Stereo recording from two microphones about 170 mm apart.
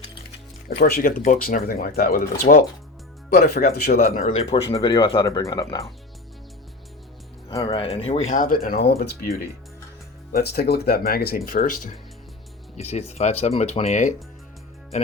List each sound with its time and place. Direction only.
0.7 s speech: 70° left (ahead or behind)
4.5 s speech: 35° left (ahead or behind)
7.6 s speech: 35° left (ahead or behind); by 9.3 s 60° left (ahead or behind)
10.3 s speech: 70° left (ahead or behind); by 14.1 s 40° left (ahead or behind)